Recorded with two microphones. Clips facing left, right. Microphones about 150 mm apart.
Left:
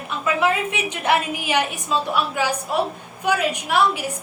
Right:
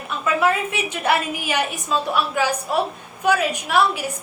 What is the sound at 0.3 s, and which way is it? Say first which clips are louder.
A woman's voice: right 2 dB; 15° left (ahead or behind).